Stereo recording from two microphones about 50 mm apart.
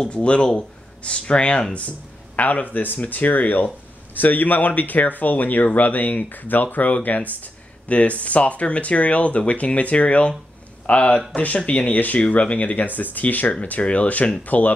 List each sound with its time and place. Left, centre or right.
0.0 s speech: left